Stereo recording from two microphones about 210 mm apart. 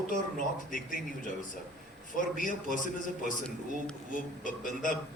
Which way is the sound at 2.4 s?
40° left (ahead or behind).